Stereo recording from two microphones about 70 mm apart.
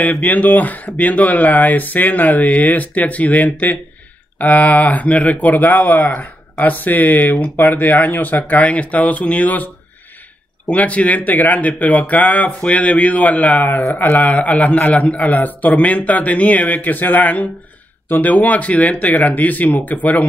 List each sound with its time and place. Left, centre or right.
0.0 s speech: left
10.7 s speech: centre